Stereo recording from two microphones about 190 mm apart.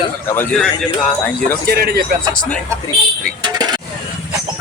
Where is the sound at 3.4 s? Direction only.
20° right (ahead or behind).